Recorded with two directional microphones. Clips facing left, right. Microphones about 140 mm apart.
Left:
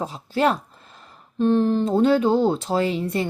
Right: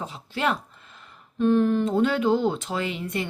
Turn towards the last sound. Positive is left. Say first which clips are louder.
# left 6 dB
turn(degrees=35)  # may be behind; listen again after turning